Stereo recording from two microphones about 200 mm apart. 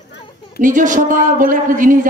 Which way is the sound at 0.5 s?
40° right (ahead or behind).